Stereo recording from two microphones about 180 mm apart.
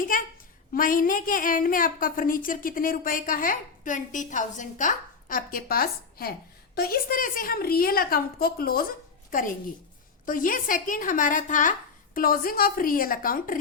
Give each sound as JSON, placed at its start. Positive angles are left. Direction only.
{"t": 0.0, "sound": "a woman's voice", "side_deg": 50}